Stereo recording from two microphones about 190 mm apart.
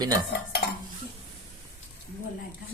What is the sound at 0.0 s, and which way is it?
Stir, 20° right (ahead or behind).